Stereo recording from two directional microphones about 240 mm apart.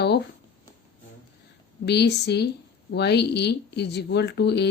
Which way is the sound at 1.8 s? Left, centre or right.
Left.